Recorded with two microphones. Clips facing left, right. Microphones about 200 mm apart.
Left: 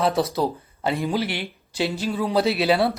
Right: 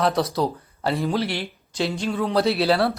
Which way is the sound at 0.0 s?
Centre (ahead or behind).